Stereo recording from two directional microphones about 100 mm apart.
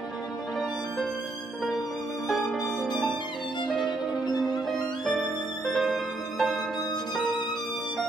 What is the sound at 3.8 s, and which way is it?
Music, 45° left (ahead or behind).